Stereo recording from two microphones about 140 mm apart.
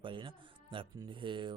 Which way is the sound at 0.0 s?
35° right (ahead or behind).